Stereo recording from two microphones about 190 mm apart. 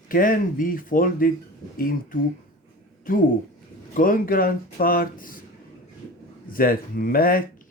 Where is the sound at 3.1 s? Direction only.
45° left (ahead or behind).